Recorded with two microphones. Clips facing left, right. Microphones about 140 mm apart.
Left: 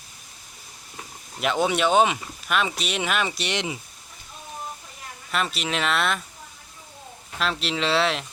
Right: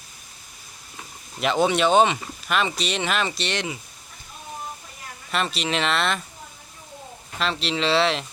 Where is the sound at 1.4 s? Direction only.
Centre (ahead or behind); by 3.8 s 15° left (ahead or behind).